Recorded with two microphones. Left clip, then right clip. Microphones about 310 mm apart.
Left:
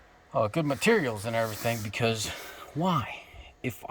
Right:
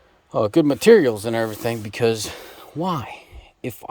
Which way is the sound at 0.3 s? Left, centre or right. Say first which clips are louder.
Right 9 dB; right.